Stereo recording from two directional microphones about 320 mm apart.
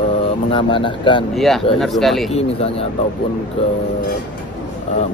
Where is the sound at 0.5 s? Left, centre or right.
Centre.